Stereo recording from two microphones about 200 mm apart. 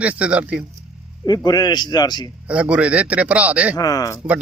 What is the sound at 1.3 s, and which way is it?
A man's voice, 20° left (ahead or behind).